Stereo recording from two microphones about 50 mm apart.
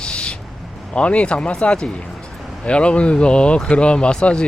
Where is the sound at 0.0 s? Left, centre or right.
Centre.